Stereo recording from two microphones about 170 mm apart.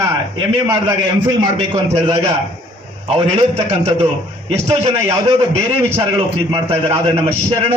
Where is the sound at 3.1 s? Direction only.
35° right (ahead or behind).